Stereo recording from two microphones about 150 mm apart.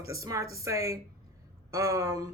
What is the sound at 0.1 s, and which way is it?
Speech, 20° right (ahead or behind).